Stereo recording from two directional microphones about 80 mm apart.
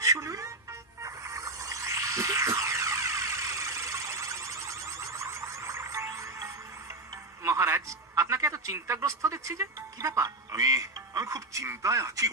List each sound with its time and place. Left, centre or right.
0.0 s music: right
7.4 s a man's voice: right